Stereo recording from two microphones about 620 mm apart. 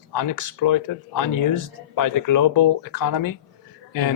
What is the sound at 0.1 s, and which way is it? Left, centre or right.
A man's voice, left.